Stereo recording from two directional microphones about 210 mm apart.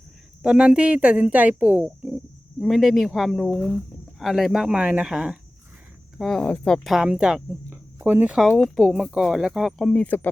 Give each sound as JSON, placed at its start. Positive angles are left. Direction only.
{"t": 0.4, "sound": "speech", "side_deg": -5}